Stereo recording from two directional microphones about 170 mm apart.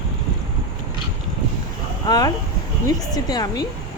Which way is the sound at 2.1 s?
20° left (ahead or behind).